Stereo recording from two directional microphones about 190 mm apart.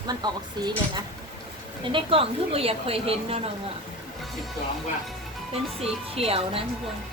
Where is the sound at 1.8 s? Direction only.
25° right (ahead or behind).